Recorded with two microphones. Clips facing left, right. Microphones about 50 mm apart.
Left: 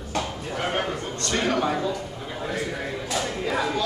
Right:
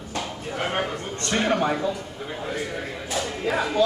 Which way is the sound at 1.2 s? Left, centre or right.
Right.